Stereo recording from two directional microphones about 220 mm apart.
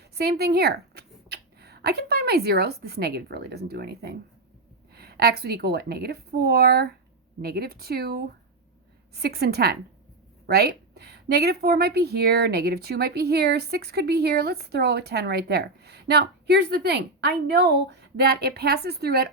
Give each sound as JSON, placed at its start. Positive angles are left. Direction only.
{"t": 0.0, "sound": "a woman's voice", "side_deg": -45}